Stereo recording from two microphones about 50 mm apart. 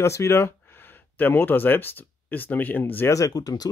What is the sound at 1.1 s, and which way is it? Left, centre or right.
Speech, left.